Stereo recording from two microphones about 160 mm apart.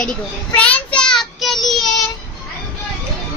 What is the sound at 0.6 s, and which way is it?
Child singing, 5° left (ahead or behind).